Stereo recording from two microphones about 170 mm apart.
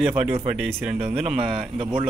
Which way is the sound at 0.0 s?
5° right (ahead or behind).